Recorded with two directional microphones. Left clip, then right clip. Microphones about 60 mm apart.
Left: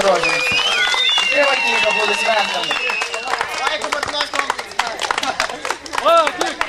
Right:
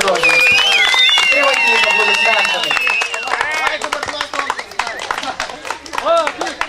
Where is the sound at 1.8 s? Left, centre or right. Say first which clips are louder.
Right 3 dB; right.